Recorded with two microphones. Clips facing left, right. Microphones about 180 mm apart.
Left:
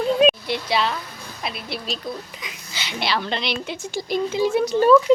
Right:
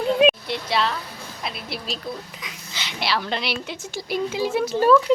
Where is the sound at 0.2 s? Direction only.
Centre (ahead or behind).